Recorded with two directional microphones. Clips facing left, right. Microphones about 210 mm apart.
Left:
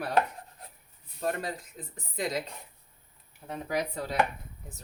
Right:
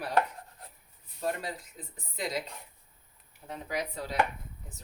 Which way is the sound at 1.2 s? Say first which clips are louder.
Left 2 dB; 55° left (ahead or behind).